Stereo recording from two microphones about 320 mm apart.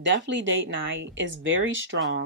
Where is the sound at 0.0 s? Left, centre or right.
Right.